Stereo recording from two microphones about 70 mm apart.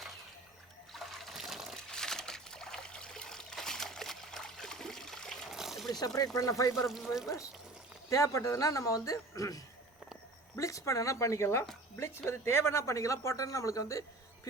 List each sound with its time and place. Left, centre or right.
0.9 s water: centre
1.9 s trickle: centre
5.5 s a sound: centre
6.1 s speech: left
6.8 s speech: centre
8.1 s a man's voice: left